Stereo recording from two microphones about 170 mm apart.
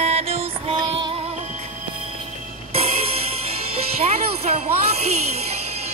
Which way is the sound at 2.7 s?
35° right (ahead or behind).